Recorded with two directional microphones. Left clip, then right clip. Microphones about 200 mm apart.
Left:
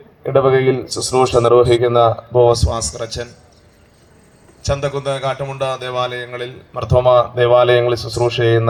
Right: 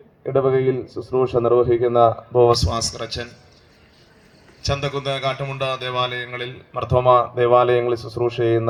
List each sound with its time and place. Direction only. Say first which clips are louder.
0.2 s speech: left 5 dB; 25° right (ahead or behind)
4.6 s a man's voice: left 4 dB; 40° right (ahead or behind)